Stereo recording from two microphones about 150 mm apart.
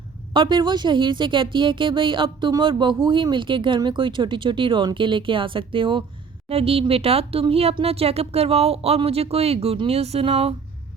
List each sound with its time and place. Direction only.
0.3 s speech: 30° right (ahead or behind)